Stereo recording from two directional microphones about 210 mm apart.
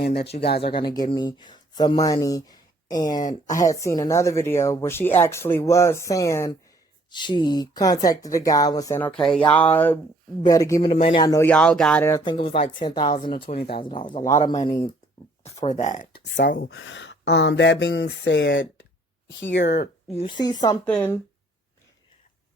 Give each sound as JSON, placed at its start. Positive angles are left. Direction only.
{"t": 0.0, "sound": "speech", "side_deg": 50}
{"t": 0.8, "sound": "speech", "side_deg": 20}
{"t": 3.2, "sound": "speech", "side_deg": 35}
{"t": 3.5, "sound": "speech", "side_deg": 15}
{"t": 14.2, "sound": "speech", "side_deg": 35}
{"t": 14.7, "sound": "speech", "side_deg": 20}
{"t": 15.8, "sound": "speech", "side_deg": 35}
{"t": 16.2, "sound": "speech", "side_deg": 55}
{"t": 16.6, "sound": "speech", "side_deg": 65}
{"t": 20.1, "sound": "speech", "side_deg": 25}
{"t": 20.8, "sound": "speech", "side_deg": 5}